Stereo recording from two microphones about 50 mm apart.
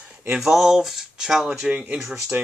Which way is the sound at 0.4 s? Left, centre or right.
Centre.